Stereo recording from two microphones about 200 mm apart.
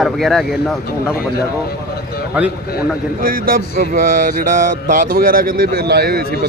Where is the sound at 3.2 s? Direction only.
45° right (ahead or behind).